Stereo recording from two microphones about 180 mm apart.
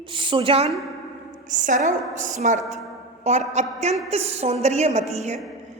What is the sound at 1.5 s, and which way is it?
A woman's voice, 45° right (ahead or behind).